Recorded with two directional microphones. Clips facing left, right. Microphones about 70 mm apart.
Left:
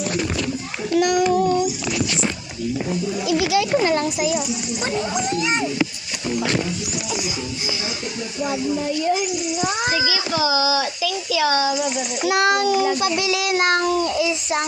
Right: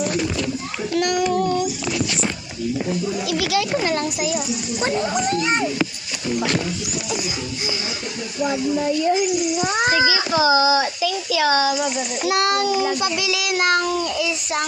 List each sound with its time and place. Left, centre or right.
0.9 s child singing: centre
3.2 s child singing: left
5.4 s a child's voice: right
10.0 s a child's voice: right
12.2 s child singing: left
12.6 s a child's voice: right
13.1 s child singing: left